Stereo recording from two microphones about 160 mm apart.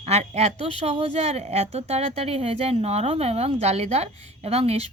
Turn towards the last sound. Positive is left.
turn(degrees=-40)  # may be behind; listen again after turning